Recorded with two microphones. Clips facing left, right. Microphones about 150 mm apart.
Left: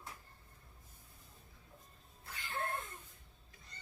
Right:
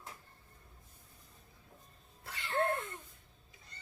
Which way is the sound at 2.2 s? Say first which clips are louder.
Right 9 dB; 85° right.